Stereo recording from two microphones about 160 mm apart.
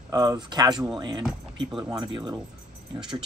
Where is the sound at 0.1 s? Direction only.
20° right (ahead or behind).